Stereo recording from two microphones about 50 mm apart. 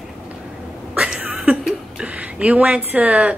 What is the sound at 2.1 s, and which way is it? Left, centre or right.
Speech, right.